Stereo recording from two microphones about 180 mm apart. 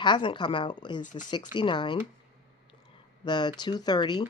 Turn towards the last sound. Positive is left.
turn(degrees=25)  # may be behind; listen again after turning